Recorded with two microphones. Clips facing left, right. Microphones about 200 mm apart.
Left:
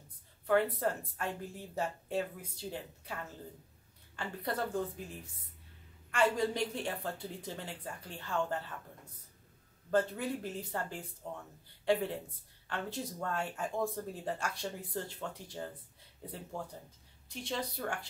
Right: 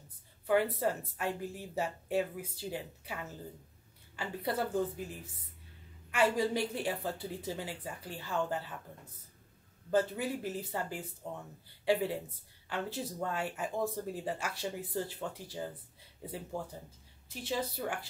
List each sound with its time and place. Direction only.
0.5 s speech: 5° right (ahead or behind)
9.8 s speech: 5° right (ahead or behind)